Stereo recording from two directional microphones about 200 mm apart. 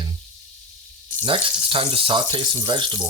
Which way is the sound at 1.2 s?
25° right (ahead or behind).